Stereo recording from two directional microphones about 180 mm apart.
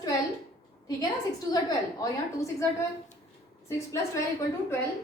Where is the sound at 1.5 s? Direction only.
20° left (ahead or behind).